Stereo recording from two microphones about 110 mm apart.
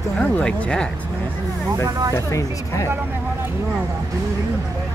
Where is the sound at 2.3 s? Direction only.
30° left (ahead or behind).